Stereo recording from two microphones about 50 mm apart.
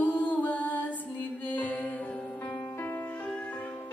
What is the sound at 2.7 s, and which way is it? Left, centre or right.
Music, left.